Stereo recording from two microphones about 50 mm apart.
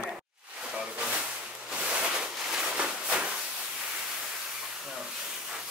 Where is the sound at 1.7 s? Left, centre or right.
Centre.